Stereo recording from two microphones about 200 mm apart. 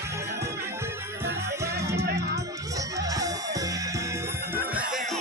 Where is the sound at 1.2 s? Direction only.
15° right (ahead or behind).